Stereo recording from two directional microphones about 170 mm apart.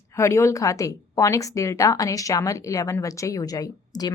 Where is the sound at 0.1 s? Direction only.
15° left (ahead or behind).